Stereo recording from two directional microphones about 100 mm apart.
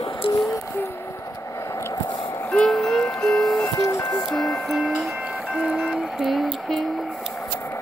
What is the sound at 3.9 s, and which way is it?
Music, 40° left (ahead or behind).